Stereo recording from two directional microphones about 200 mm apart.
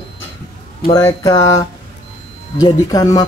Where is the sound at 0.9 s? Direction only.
20° left (ahead or behind).